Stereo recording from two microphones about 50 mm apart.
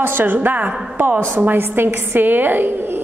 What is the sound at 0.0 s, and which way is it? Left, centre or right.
A woman's voice, right.